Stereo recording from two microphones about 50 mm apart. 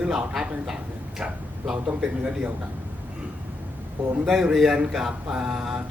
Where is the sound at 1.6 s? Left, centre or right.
Centre.